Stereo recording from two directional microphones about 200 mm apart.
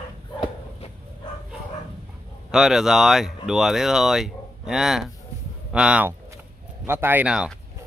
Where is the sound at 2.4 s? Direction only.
5° right (ahead or behind).